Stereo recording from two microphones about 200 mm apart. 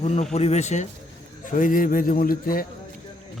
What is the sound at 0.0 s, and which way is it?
A man's voice, 35° left (ahead or behind).